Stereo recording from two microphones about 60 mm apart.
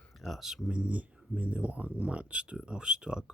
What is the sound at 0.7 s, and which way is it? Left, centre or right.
Speech, right.